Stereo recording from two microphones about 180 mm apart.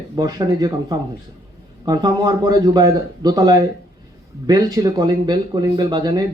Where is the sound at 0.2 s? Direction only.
20° right (ahead or behind).